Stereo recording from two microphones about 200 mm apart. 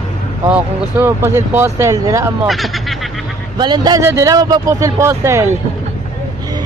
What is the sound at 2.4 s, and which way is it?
Speech, centre (ahead or behind).